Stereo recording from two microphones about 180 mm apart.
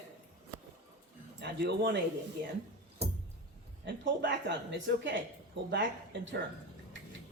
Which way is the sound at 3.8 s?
80° right.